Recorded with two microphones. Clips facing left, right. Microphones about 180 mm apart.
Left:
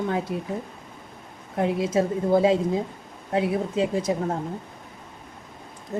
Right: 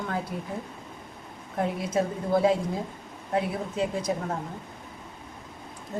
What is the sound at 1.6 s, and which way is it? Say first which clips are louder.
A woman's voice: left 5 dB; 25° left (ahead or behind).